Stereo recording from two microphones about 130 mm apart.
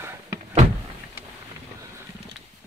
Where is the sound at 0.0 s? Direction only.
20° right (ahead or behind).